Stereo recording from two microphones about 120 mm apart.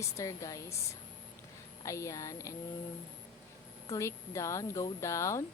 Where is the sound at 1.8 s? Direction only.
25° left (ahead or behind).